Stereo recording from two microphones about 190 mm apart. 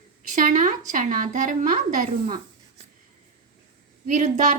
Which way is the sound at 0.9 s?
40° right (ahead or behind).